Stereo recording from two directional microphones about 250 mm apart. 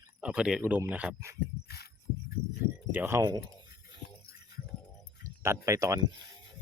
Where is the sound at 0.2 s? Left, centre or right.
Centre.